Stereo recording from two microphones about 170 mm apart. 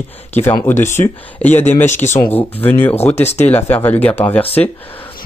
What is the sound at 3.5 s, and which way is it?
Speech, 10° left (ahead or behind).